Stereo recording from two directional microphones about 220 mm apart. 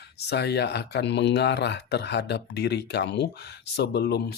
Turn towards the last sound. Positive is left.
turn(degrees=45)  # may be behind; listen again after turning